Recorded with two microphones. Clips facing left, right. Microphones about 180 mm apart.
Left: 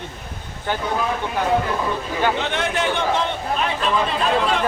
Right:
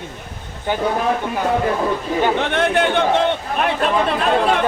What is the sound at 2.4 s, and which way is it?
A man's voice, 55° right (ahead or behind).